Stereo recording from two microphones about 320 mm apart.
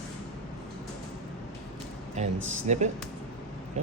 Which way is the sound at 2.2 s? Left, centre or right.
Right.